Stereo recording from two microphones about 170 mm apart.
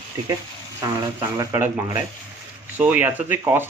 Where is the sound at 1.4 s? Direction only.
15° right (ahead or behind).